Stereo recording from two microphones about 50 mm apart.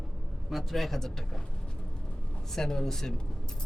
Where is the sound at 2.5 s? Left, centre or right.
Centre.